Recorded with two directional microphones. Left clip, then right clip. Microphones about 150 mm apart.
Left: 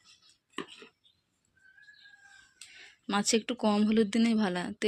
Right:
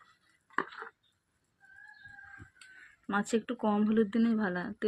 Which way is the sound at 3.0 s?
30° left (ahead or behind).